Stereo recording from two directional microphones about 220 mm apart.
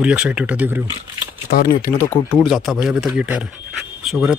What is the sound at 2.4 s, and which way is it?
Speech, centre (ahead or behind).